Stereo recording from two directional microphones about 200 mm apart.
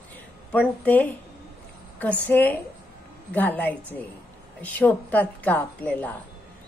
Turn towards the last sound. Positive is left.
turn(degrees=10)  # may be behind; listen again after turning